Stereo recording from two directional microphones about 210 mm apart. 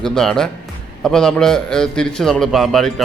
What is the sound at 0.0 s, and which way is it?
A man's voice, centre (ahead or behind).